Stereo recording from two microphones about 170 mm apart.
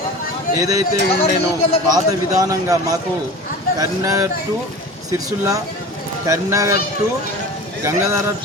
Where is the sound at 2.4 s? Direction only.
20° right (ahead or behind).